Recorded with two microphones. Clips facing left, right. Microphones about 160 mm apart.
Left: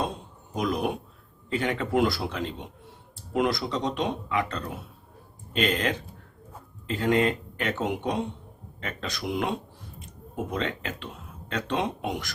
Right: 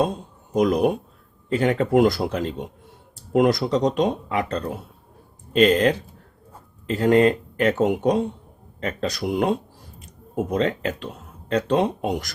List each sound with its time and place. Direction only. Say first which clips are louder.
0.5 s speech: right 8 dB; 45° right (ahead or behind)